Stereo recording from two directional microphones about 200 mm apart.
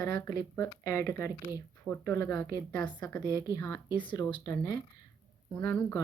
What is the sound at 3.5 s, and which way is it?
Speech, 15° left (ahead or behind).